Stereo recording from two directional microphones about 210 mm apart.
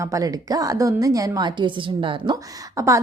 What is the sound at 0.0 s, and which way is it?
A woman's voice, 15° right (ahead or behind).